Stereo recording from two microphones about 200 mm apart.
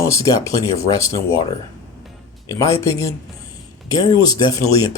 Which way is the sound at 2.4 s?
15° left (ahead or behind).